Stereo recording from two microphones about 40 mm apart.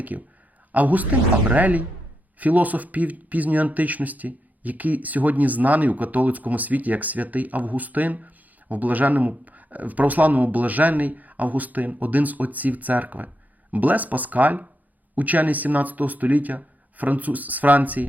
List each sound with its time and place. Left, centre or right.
0.1 s speech: right